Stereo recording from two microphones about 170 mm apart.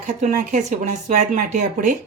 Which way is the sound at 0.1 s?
50° right (ahead or behind).